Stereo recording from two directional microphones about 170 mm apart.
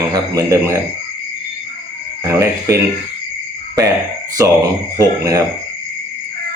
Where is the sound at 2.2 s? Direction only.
15° right (ahead or behind).